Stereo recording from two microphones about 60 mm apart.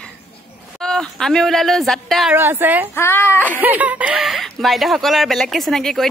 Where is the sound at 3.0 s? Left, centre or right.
Left.